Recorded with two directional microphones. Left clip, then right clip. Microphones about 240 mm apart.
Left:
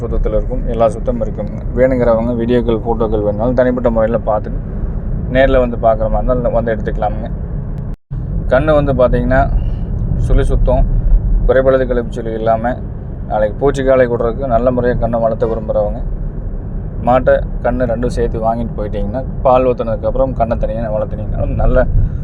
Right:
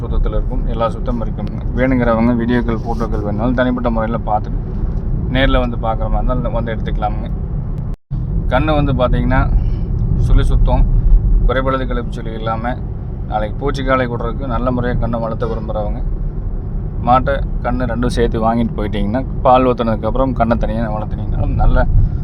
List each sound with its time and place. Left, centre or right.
0.0 s speech: centre
2.0 s speech: centre
2.3 s speech: centre
8.4 s speech: centre
17.0 s speech: centre
18.0 s speech: centre
20.9 s speech: centre